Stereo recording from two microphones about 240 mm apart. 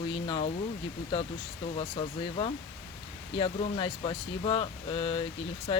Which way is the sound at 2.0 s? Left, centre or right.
Left.